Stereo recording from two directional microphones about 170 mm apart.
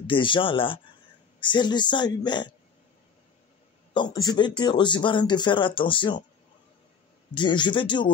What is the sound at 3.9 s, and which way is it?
Speech, 25° left (ahead or behind).